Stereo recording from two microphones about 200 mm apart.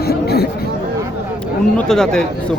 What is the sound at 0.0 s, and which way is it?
Chatter, 50° left (ahead or behind).